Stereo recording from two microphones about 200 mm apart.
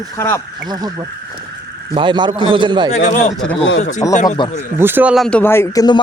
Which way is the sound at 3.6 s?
65° left (ahead or behind).